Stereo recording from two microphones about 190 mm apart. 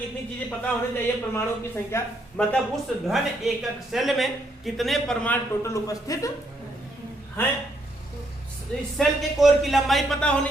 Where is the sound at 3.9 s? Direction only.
Centre (ahead or behind); by 6.3 s 20° left (ahead or behind).